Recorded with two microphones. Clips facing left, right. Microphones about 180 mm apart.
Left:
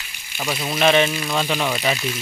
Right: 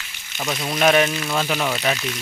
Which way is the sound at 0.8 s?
5° right (ahead or behind).